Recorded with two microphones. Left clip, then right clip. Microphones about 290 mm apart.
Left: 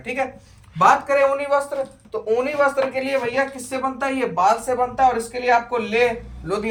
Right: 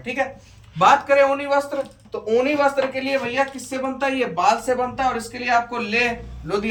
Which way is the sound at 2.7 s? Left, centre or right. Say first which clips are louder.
Left 1 dB; centre.